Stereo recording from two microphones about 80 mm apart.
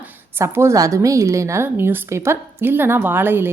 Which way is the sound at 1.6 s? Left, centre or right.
Right.